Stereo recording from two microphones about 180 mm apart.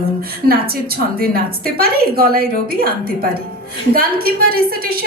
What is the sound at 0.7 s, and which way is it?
A woman's voice, 55° right (ahead or behind).